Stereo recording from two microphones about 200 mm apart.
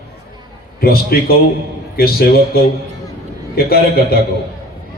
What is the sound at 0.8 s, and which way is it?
A man's voice, 50° left (ahead or behind).